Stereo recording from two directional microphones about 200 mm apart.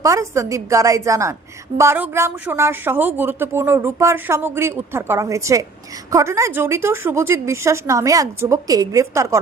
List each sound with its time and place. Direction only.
0.0 s speech: 15° right (ahead or behind)